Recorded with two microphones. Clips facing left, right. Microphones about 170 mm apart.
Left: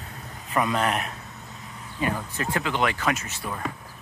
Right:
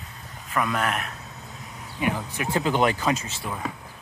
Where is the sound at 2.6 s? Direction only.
40° right (ahead or behind).